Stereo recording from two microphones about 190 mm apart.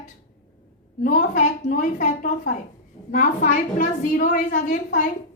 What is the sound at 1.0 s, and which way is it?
A woman's voice, 45° left (ahead or behind).